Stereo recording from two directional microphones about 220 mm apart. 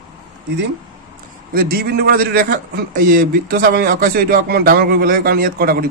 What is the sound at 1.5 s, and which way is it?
A man's voice, 40° right (ahead or behind).